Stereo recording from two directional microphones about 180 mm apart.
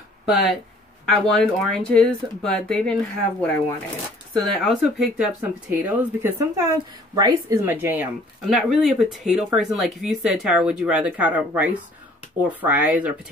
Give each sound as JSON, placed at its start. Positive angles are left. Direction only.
{"t": 1.0, "sound": "speech", "side_deg": 5}